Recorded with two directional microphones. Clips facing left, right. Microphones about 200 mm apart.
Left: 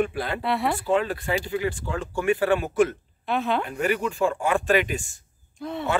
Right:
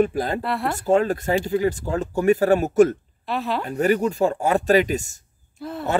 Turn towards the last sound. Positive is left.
turn(degrees=0)  # may be behind; listen again after turning